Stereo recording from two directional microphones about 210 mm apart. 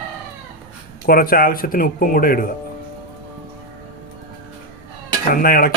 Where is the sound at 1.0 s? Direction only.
45° left (ahead or behind).